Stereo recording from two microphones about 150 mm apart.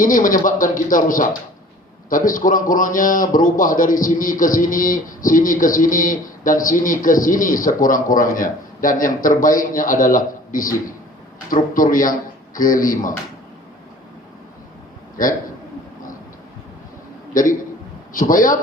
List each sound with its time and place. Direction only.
0.0 s a man's voice: 65° left (ahead or behind)
18.1 s a man's voice: 65° left (ahead or behind)